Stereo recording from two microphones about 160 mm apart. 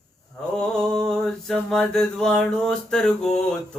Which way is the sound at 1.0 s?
5° left (ahead or behind).